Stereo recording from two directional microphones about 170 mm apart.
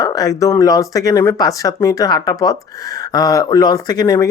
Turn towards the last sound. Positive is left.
turn(degrees=20)  # may be behind; listen again after turning